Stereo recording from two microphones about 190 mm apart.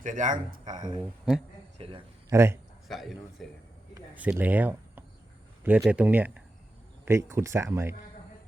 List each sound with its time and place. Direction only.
0.0 s speech: 45° right (ahead or behind)
0.8 s speech: 25° right (ahead or behind)
1.0 s speech: 5° right (ahead or behind)
1.8 s a man's voice: 30° right (ahead or behind)
2.3 s speech: 15° right (ahead or behind)
2.8 s a man's voice: centre (ahead or behind)
3.9 s a sound: 10° right (ahead or behind)
5.6 s speech: 10° right (ahead or behind)